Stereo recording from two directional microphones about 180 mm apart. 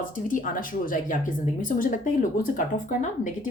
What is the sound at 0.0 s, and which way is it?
Speech, 50° left (ahead or behind).